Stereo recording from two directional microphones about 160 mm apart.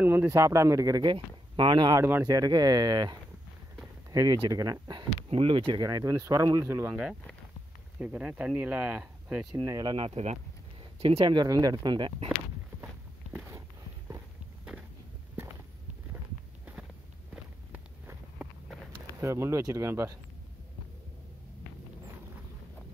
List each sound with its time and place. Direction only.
0.0 s speech: 15° right (ahead or behind)
9.5 s speech: 25° right (ahead or behind)
9.9 s speech: 40° right (ahead or behind)
17.3 s walk: 10° right (ahead or behind)
19.1 s speech: 20° right (ahead or behind)